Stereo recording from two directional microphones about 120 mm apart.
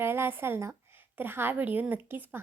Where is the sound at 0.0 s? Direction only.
20° right (ahead or behind).